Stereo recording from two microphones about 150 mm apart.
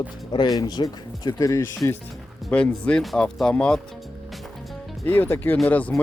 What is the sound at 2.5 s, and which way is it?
Speech, 10° left (ahead or behind).